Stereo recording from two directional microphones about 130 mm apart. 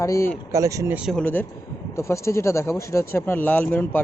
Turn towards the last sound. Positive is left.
turn(degrees=15)  # may be behind; listen again after turning